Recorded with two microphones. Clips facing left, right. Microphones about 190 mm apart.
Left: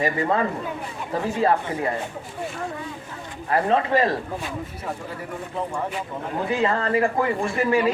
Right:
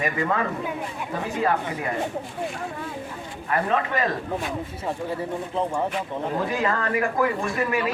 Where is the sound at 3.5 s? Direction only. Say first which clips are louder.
Left 4 dB; 30° left (ahead or behind).